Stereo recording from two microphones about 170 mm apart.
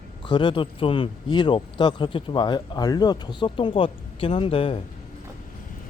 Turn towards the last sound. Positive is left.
turn(degrees=35)  # may be behind; listen again after turning